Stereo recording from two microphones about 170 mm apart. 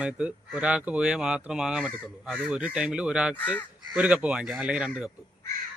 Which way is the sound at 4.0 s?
5° right (ahead or behind).